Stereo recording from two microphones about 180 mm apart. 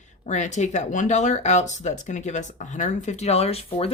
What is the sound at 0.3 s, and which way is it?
Speech, 40° left (ahead or behind).